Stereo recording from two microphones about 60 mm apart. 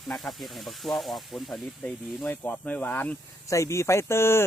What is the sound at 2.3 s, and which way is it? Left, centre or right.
Speech, left.